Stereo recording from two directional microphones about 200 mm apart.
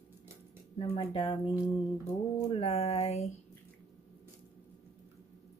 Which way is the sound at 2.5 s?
30° left (ahead or behind).